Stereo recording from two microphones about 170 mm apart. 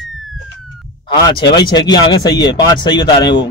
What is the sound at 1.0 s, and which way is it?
A man's voice, 25° left (ahead or behind).